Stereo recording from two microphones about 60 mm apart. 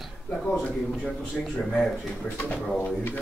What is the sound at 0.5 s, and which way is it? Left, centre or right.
Speech, centre.